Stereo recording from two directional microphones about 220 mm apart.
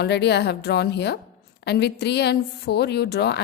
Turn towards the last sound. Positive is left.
turn(degrees=50)  # may be behind; listen again after turning